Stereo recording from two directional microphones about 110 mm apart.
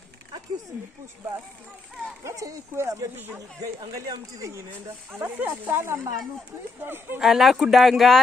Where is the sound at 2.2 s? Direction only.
30° right (ahead or behind).